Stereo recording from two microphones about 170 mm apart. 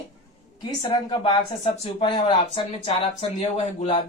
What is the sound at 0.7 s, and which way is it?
Speech, 25° left (ahead or behind).